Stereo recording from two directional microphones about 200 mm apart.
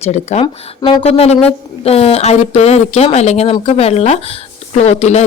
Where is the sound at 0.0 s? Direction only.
35° left (ahead or behind).